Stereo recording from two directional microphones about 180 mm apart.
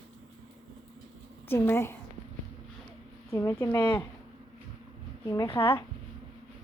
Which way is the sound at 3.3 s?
15° left (ahead or behind).